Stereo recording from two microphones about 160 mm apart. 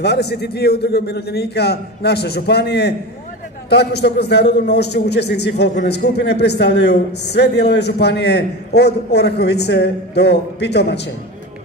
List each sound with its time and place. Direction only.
0.0 s a man's voice: 90° left